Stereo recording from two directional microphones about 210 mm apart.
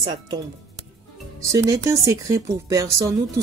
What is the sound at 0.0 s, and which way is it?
Speech, 20° right (ahead or behind).